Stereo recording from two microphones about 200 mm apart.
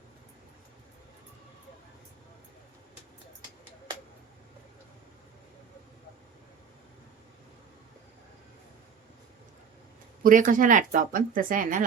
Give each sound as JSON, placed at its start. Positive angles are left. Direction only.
{"t": 10.2, "sound": "speech", "side_deg": -40}